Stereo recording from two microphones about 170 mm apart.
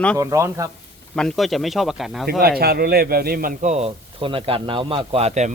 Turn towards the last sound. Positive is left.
turn(degrees=-40)  # may be behind; listen again after turning